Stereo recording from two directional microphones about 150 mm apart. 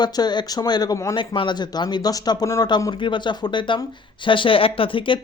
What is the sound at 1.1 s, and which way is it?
Speech, 35° left (ahead or behind).